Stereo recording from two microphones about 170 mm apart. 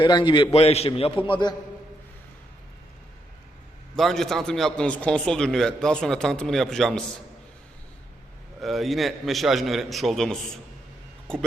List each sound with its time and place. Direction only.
0.0 s a man's voice: 30° left (ahead or behind)
3.9 s a man's voice: centre (ahead or behind)
8.6 s a man's voice: centre (ahead or behind)